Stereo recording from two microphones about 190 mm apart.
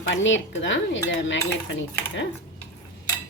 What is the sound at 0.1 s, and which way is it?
Speech, 75° left (ahead or behind).